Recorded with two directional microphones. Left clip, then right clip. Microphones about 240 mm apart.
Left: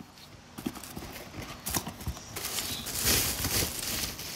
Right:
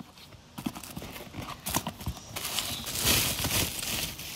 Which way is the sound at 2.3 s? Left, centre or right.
Centre.